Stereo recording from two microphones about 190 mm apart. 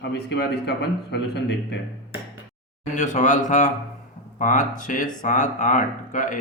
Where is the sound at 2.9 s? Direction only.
40° left (ahead or behind).